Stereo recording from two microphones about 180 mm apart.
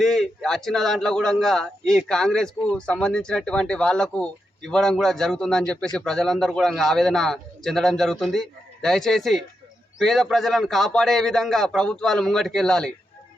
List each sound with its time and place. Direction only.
0.0 s a man's voice: centre (ahead or behind)